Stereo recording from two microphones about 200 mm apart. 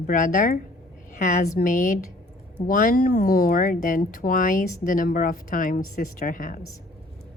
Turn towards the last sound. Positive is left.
turn(degrees=40)  # may be behind; listen again after turning